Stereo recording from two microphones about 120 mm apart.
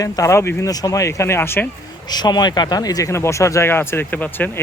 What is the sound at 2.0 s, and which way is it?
Speech, 35° left (ahead or behind).